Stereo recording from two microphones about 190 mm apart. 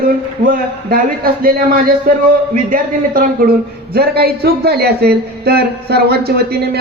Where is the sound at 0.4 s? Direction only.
45° right (ahead or behind).